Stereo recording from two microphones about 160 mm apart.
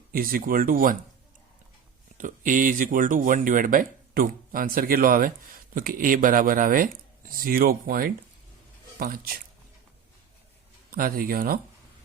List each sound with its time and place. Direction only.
0.1 s speech: 65° right (ahead or behind)
2.1 s speech: 55° right (ahead or behind)
10.9 s speech: 65° right (ahead or behind)